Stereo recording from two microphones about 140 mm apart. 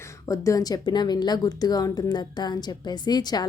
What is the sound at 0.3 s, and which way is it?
Speech, 25° left (ahead or behind).